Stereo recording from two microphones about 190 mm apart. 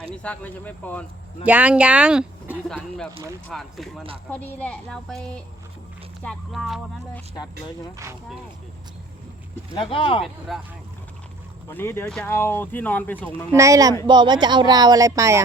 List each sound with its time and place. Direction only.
0.0 s speech: 5° left (ahead or behind)
1.5 s a woman's voice: 10° right (ahead or behind)
9.7 s speech: 30° left (ahead or behind)
10.5 s a woman's voice: centre (ahead or behind)
11.7 s speech: 10° left (ahead or behind)
13.5 s speech: 15° right (ahead or behind)